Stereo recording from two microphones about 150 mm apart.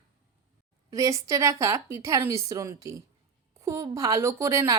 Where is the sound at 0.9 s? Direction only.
20° right (ahead or behind).